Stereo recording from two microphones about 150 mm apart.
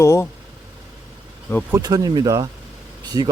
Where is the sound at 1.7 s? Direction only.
25° right (ahead or behind).